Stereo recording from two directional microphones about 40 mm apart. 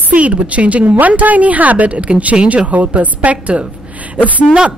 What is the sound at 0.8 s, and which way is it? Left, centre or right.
Speech, right.